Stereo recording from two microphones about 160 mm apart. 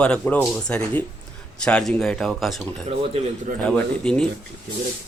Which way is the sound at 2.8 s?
45° right (ahead or behind).